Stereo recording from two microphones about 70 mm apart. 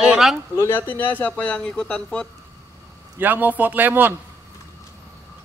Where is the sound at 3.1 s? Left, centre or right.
Right.